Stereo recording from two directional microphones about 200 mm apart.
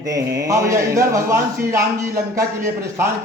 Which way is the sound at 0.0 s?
20° right (ahead or behind).